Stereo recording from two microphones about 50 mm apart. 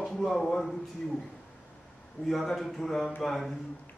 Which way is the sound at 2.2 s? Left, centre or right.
Centre.